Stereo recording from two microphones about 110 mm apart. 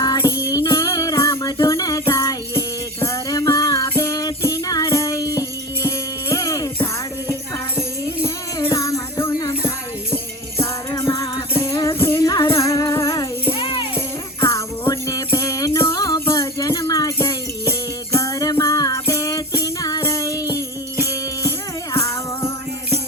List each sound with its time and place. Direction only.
0.0 s music: 30° left (ahead or behind)
7.8 s music: 25° left (ahead or behind)
13.5 s music: 50° left (ahead or behind)
14.4 s music: 30° left (ahead or behind)